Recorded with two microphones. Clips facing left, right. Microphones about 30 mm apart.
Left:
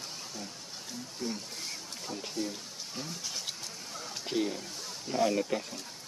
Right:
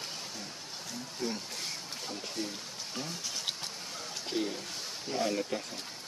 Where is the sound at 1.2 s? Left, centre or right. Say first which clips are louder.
Right 1 dB; right.